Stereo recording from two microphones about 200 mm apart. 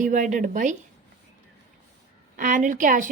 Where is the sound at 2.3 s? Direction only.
40° right (ahead or behind).